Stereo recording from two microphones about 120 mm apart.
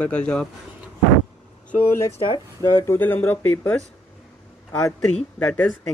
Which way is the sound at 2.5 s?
25° left (ahead or behind).